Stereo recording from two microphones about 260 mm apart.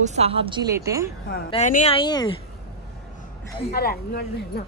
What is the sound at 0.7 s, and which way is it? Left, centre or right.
Speech, centre.